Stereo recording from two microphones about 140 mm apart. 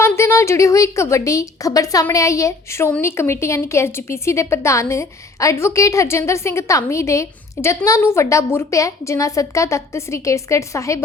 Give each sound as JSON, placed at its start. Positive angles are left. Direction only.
{"t": 0.0, "sound": "a woman's voice", "side_deg": 20}